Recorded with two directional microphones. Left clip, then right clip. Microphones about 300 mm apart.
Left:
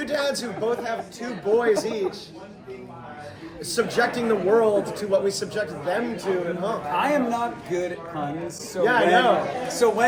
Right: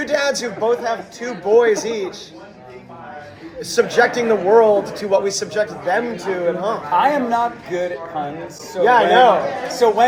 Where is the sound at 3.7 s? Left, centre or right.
Centre.